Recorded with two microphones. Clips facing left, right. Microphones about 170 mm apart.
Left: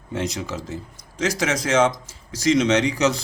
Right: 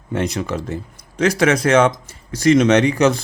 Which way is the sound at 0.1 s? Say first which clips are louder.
Right 5 dB; 60° right (ahead or behind).